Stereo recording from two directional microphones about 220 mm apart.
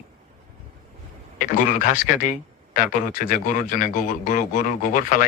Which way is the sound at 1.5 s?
35° left (ahead or behind).